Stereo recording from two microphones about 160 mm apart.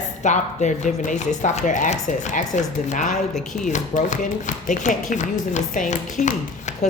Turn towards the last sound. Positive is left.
turn(degrees=50)  # may be behind; listen again after turning